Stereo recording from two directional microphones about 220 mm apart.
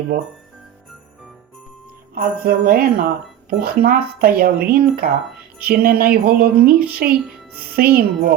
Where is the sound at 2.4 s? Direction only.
45° right (ahead or behind).